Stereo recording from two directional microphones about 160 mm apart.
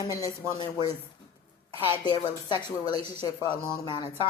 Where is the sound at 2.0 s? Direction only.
30° left (ahead or behind).